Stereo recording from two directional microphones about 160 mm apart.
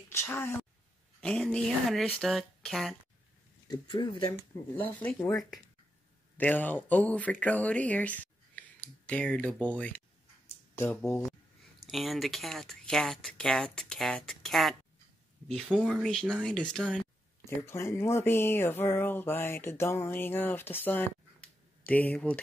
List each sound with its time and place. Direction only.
0.1 s a woman's voice: 15° left (ahead or behind)
1.2 s speech: 5° left (ahead or behind)
3.6 s speech: 30° left (ahead or behind)
6.3 s speech: 10° left (ahead or behind)
17.6 s speech: 15° left (ahead or behind)